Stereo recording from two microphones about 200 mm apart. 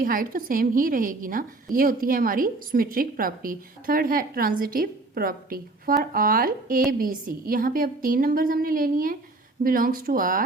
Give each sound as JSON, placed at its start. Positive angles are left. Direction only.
{"t": 0.0, "sound": "a woman's voice", "side_deg": -45}